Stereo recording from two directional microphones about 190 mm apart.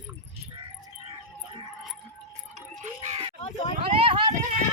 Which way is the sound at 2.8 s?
35° right (ahead or behind).